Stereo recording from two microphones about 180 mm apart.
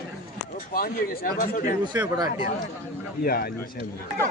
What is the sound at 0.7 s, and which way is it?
A man's voice, 55° left (ahead or behind).